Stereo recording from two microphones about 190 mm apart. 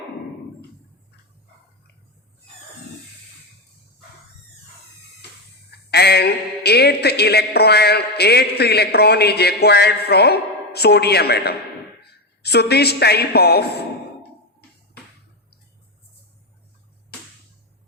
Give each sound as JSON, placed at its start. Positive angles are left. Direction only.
{"t": 5.9, "sound": "a woman's voice", "side_deg": 60}